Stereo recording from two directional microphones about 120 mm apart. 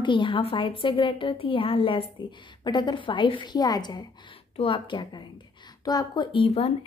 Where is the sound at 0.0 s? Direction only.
40° left (ahead or behind).